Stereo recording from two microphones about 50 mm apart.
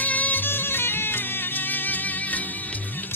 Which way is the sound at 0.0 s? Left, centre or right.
Left.